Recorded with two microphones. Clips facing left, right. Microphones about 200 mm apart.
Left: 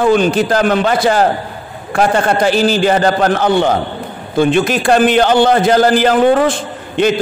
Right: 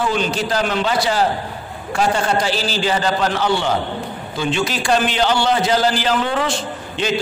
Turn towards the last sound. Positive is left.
turn(degrees=55)  # may be behind; listen again after turning